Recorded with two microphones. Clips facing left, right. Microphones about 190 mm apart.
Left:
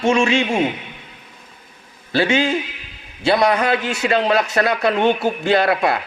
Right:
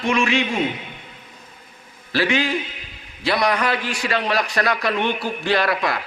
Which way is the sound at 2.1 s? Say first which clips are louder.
Left 3 dB; 25° left (ahead or behind).